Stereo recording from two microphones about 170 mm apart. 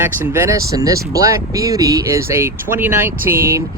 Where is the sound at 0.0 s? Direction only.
15° right (ahead or behind).